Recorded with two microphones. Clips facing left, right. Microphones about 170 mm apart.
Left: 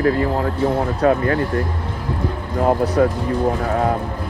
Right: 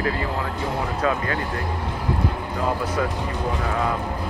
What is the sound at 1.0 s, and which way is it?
Speech, 50° left (ahead or behind).